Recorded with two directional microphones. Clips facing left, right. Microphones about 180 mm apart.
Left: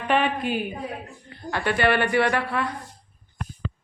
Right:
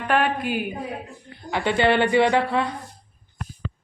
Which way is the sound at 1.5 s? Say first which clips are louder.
Right 2 dB; 20° right (ahead or behind).